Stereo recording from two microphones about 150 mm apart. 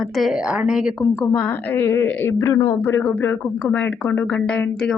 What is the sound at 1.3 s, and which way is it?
A woman's voice, 10° left (ahead or behind).